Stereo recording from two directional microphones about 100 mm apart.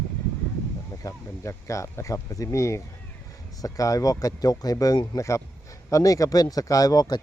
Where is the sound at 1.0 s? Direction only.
30° left (ahead or behind).